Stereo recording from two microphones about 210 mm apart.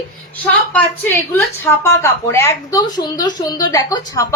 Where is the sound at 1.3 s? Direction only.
10° left (ahead or behind).